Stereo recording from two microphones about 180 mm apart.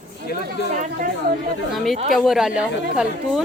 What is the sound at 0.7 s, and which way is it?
Speech, 45° right (ahead or behind).